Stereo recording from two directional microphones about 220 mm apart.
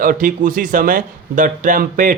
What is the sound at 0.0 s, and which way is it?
Speech, 40° right (ahead or behind).